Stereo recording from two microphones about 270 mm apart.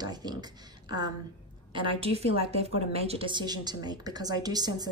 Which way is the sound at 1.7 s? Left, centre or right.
Centre.